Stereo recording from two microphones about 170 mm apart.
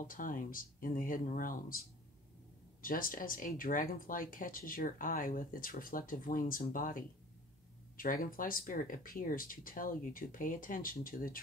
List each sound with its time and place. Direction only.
0.0 s speech: 55° left (ahead or behind)
2.8 s speech: 55° left (ahead or behind)